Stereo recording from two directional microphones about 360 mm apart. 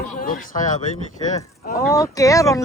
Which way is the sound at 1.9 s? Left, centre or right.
Centre.